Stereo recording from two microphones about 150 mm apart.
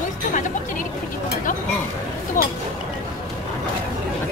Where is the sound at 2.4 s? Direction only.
65° left (ahead or behind).